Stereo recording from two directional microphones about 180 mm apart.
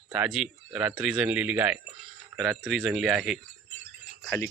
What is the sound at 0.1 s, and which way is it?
Speech, 5° right (ahead or behind).